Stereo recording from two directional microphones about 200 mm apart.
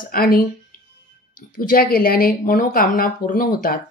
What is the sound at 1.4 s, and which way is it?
Speech, 45° left (ahead or behind).